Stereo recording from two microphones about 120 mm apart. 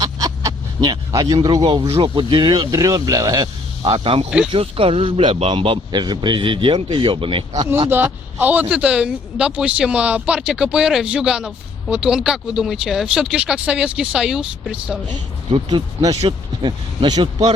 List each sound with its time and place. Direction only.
0.0 s a sound: 30° right (ahead or behind)
1.9 s speech: 45° right (ahead or behind)
3.8 s a man's voice: 50° right (ahead or behind)
7.9 s a man's voice: 15° right (ahead or behind)
16.3 s a man's voice: 45° right (ahead or behind)